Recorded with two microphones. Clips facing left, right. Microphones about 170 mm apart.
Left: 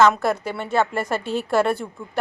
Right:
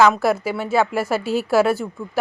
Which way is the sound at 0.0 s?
5° right (ahead or behind).